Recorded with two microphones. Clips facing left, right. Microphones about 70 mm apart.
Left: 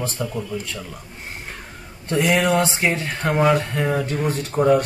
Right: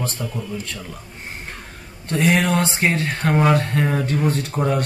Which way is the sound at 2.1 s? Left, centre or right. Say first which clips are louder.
Even; centre.